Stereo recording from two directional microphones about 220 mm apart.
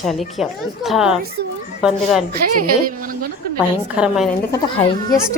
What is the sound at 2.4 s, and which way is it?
Speech, 40° right (ahead or behind).